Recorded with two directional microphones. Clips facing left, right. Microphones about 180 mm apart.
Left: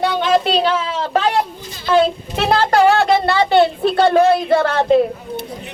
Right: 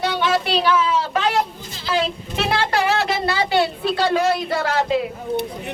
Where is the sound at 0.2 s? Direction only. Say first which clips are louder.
Left 5 dB; 45° left (ahead or behind).